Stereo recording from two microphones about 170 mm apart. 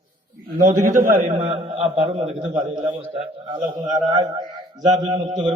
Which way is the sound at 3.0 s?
30° right (ahead or behind).